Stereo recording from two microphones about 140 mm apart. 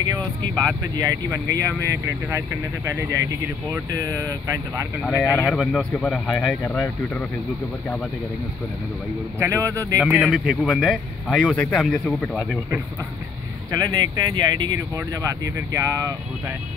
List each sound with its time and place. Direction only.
0.2 s speech: 5° left (ahead or behind)
0.9 s speech: 25° right (ahead or behind)
5.3 s speech: 10° left (ahead or behind)
9.4 s speech: 20° right (ahead or behind)
10.0 s speech: 5° right (ahead or behind); by 12.5 s 10° left (ahead or behind)
13.7 s speech: 25° right (ahead or behind)